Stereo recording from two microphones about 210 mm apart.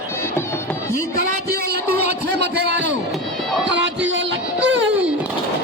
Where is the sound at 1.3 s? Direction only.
45° right (ahead or behind).